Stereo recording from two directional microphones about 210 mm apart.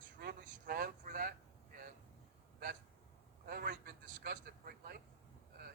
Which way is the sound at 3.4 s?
45° right (ahead or behind).